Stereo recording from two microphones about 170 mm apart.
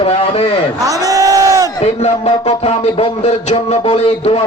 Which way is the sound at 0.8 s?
20° right (ahead or behind).